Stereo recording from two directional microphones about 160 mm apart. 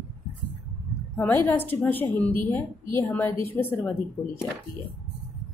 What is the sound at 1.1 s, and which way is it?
A woman's voice, 10° left (ahead or behind).